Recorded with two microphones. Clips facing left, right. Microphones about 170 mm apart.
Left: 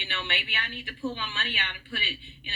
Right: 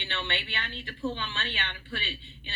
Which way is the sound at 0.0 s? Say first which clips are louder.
Right 1 dB; 15° left (ahead or behind).